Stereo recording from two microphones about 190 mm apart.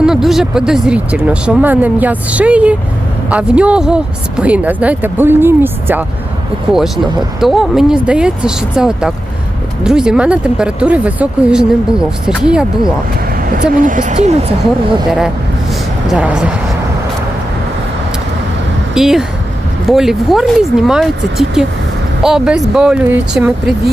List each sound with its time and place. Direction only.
0.0 s speech: centre (ahead or behind)
13.4 s speech: 45° right (ahead or behind)
16.0 s speech: 5° right (ahead or behind)
18.9 s speech: centre (ahead or behind)